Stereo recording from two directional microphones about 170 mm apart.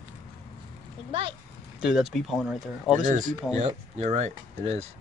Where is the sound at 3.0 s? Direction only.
50° right (ahead or behind).